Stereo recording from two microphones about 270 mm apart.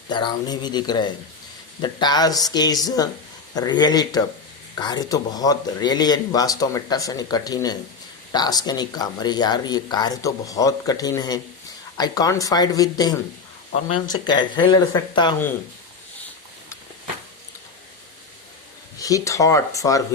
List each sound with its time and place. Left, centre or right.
0.1 s speech: centre
18.9 s speech: centre